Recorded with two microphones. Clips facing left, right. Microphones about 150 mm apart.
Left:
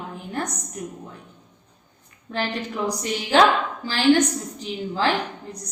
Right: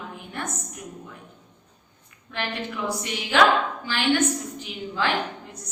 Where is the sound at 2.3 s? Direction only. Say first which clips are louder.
Left 4 dB; 35° left (ahead or behind).